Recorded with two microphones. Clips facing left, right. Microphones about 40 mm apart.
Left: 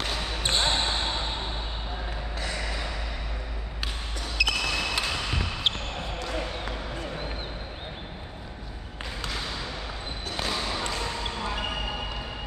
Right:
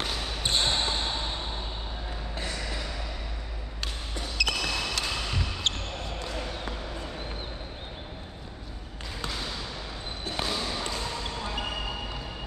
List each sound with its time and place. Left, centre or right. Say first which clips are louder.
0.0 s basketball bounce: left 2 dB; centre
0.5 s basketball bounce: left 1 dB; left
4.4 s basketball bounce: left 3 dB; centre
10.4 s basketball bounce: left 2 dB; centre